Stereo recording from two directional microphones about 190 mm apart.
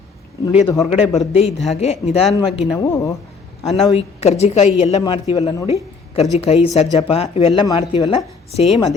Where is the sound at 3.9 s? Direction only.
35° left (ahead or behind).